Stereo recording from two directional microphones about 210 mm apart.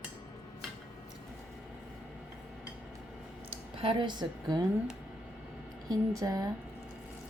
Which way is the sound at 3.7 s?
25° right (ahead or behind).